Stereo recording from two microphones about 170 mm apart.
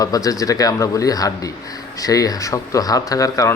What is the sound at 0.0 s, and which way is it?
Speech, 20° left (ahead or behind).